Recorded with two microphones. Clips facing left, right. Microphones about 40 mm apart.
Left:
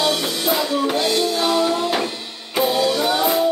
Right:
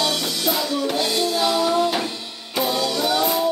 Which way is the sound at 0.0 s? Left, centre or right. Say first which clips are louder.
Left 2 dB; centre.